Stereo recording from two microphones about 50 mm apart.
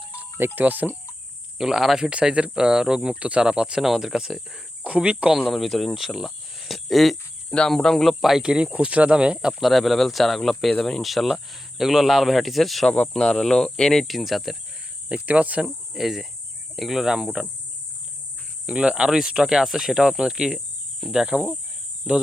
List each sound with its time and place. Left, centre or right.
0.3 s speech: right
1.5 s speech: centre
2.0 s speech: centre
3.8 s speech: centre
4.8 s speech: right
5.5 s speech: centre
7.5 s speech: centre
8.4 s speech: centre
9.6 s speech: centre
11.0 s speech: centre
15.1 s speech: right
16.0 s speech: centre
18.6 s speech: right